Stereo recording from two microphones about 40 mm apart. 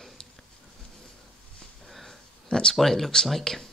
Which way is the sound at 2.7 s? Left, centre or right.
Centre.